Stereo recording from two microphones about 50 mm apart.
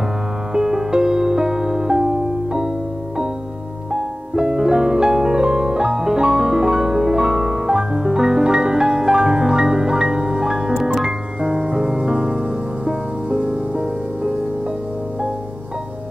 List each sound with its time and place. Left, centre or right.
0.5 s music: centre
3.9 s piano: centre
11.0 s music: centre